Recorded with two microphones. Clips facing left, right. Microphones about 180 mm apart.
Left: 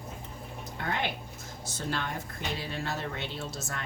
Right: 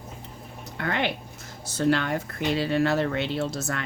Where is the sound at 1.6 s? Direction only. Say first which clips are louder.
Right 11 dB; 70° right (ahead or behind).